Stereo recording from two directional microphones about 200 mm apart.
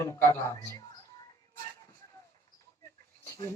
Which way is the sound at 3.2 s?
15° left (ahead or behind).